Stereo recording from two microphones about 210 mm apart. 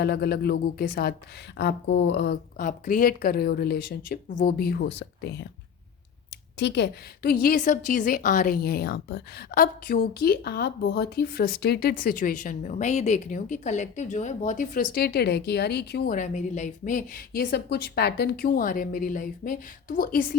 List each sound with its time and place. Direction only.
0.0 s a woman's voice: 50° left (ahead or behind)
6.6 s a woman's voice: 55° left (ahead or behind)